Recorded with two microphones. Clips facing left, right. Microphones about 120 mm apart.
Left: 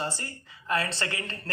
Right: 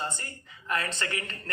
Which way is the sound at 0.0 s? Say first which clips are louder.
Left 2 dB; 30° left (ahead or behind).